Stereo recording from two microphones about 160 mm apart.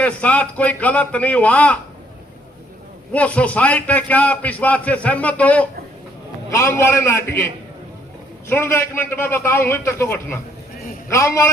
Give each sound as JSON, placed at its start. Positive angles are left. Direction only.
{"t": 0.0, "sound": "a man's voice", "side_deg": 10}
{"t": 3.1, "sound": "a man's voice", "side_deg": 10}